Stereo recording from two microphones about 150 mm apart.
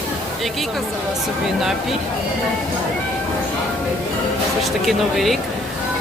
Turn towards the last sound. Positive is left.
turn(degrees=0)  # may be behind; listen again after turning